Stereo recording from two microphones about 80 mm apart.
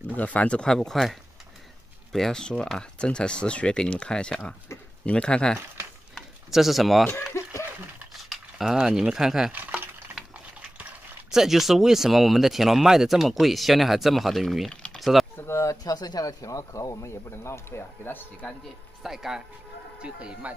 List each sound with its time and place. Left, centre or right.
0.1 s speech: centre
2.1 s speech: centre
6.5 s speech: centre
8.1 s speech: centre
9.5 s a sound: right
11.2 s speech: centre
14.7 s typing: centre
15.0 s typing: centre
15.3 s speech: left
18.4 s speech: centre
19.0 s speech: centre